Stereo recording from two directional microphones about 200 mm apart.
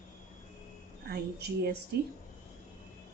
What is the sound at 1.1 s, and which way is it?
Speech, 55° right (ahead or behind).